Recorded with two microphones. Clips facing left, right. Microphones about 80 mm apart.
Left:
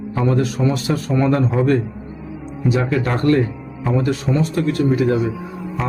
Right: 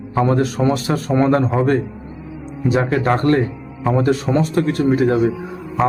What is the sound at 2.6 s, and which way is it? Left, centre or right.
A man's voice, right.